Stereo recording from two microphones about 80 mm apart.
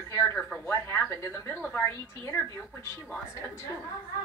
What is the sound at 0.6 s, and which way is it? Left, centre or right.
Speech, left.